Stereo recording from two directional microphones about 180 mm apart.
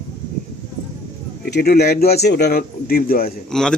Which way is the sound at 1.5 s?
65° left (ahead or behind).